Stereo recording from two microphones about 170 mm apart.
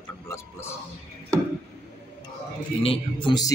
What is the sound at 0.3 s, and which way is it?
Speech, 15° left (ahead or behind).